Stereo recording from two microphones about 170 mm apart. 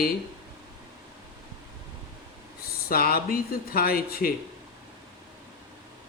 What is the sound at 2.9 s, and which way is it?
A man's voice, 60° left (ahead or behind).